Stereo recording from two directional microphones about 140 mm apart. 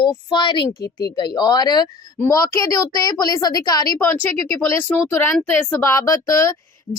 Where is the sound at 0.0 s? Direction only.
35° left (ahead or behind).